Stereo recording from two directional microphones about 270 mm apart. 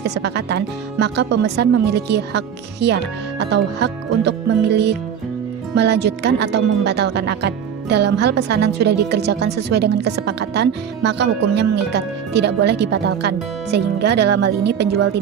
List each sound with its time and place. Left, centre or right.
0.0 s speech: right